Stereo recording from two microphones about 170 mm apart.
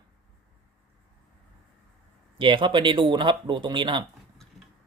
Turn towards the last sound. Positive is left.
turn(degrees=-30)  # may be behind; listen again after turning